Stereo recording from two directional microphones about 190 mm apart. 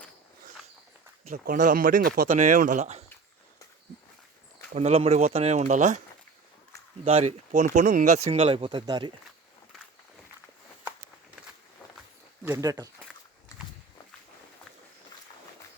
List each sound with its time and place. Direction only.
1.2 s speech: 45° right (ahead or behind)
4.7 s speech: 35° right (ahead or behind)
7.0 s speech: 35° right (ahead or behind)
12.5 s speech: 20° right (ahead or behind)